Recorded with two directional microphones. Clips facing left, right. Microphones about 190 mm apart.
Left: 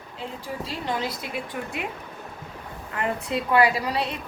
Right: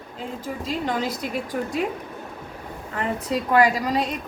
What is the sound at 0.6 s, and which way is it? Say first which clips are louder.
A woman's voice: right 4 dB; 45° right (ahead or behind).